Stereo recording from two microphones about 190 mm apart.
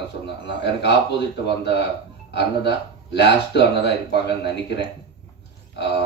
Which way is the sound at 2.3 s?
60° left (ahead or behind).